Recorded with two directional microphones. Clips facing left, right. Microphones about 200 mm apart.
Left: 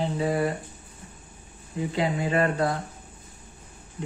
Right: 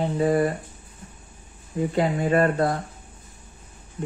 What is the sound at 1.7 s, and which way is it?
Speech, 50° right (ahead or behind).